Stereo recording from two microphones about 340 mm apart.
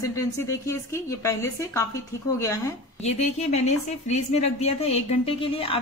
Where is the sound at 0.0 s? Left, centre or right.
Centre.